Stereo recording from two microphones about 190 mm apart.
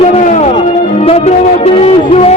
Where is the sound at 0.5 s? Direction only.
30° left (ahead or behind).